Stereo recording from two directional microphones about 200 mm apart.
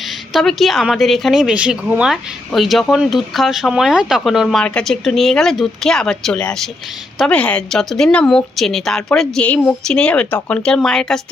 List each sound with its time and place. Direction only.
0.3 s a woman's voice: centre (ahead or behind)